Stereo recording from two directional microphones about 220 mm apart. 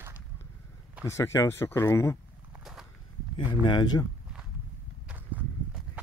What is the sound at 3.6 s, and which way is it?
Speech, 20° left (ahead or behind).